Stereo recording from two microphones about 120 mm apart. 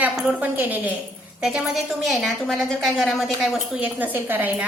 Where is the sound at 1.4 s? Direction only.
5° right (ahead or behind).